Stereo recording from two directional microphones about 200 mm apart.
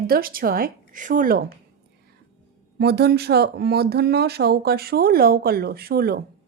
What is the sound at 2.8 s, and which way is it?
Speech, 55° right (ahead or behind).